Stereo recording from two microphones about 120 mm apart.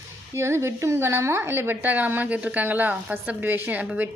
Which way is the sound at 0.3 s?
25° right (ahead or behind).